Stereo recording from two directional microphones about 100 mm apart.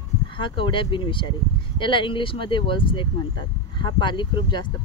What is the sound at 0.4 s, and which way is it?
Speech, 60° left (ahead or behind).